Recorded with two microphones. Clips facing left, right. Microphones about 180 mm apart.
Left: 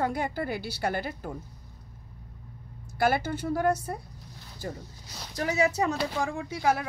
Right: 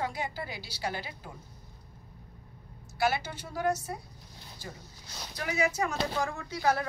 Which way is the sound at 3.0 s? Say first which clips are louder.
Left 4 dB; 50° left (ahead or behind).